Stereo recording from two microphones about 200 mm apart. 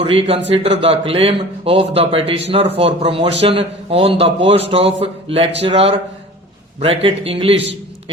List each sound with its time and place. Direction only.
0.0 s speech: 30° right (ahead or behind)